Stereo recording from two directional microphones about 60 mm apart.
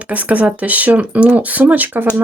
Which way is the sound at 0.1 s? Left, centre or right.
Right.